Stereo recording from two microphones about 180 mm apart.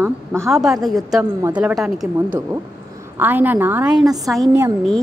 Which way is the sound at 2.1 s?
15° right (ahead or behind).